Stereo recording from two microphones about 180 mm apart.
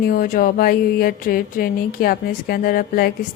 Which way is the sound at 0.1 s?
50° left (ahead or behind).